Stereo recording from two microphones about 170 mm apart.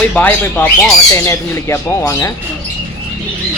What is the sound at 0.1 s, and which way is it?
Speech, 10° left (ahead or behind).